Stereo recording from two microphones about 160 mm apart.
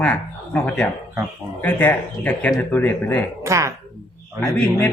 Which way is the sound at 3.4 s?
20° right (ahead or behind).